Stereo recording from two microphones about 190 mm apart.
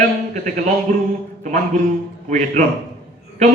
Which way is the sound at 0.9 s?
45° right (ahead or behind).